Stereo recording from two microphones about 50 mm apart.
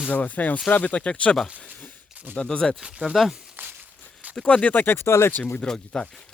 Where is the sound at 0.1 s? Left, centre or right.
Left; by 2.7 s centre.